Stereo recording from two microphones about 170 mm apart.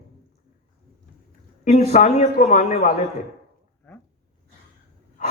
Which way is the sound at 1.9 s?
45° left (ahead or behind).